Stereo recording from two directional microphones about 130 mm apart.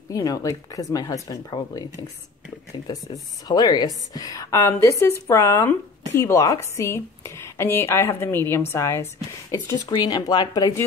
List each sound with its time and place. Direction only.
0.1 s speech: 25° left (ahead or behind)
2.9 s speech: 30° left (ahead or behind)
9.8 s speech: 30° left (ahead or behind)